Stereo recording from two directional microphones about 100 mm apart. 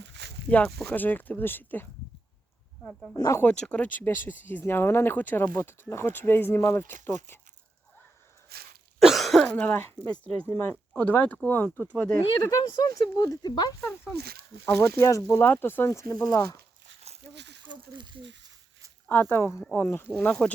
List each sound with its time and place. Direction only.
0.4 s speech: 10° left (ahead or behind)
3.2 s speech: 35° left (ahead or behind)
3.4 s speech: 10° left (ahead or behind)
9.0 s cough: centre (ahead or behind)
9.6 s speech: 20° left (ahead or behind)
12.4 s speech: 40° left (ahead or behind)
13.8 s speech: 25° left (ahead or behind)
17.7 s speech: 50° right (ahead or behind)
19.0 s speech: 20° left (ahead or behind)
20.1 s speech: 15° left (ahead or behind)